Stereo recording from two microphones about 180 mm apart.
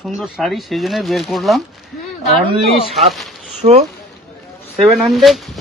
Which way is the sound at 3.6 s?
40° right (ahead or behind).